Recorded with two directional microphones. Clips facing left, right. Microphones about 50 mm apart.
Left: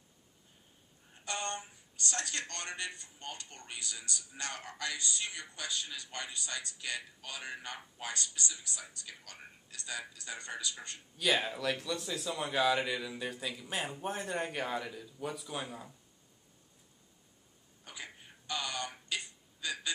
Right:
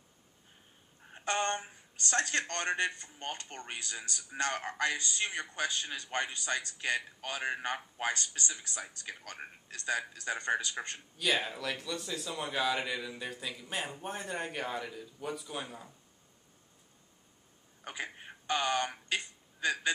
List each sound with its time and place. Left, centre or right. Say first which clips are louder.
1.1 s speech: right 6 dB; right
11.1 s speech: left 1 dB; centre
17.8 s a sound: right 7 dB; right